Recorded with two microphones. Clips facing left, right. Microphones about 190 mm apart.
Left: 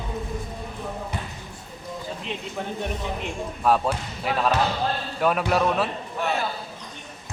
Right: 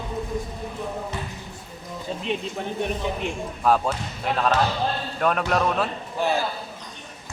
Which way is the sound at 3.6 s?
Centre (ahead or behind).